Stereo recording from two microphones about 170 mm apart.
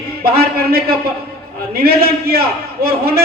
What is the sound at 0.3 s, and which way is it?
Speech, 65° right (ahead or behind).